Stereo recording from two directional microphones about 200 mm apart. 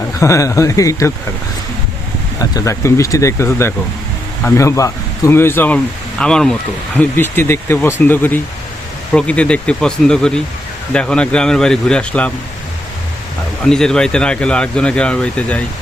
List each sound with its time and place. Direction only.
0.2 s speech: 15° left (ahead or behind)
2.4 s speech: 15° left (ahead or behind)
13.7 s speech: 5° left (ahead or behind)